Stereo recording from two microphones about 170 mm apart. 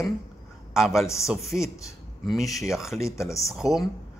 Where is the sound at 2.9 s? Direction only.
15° left (ahead or behind).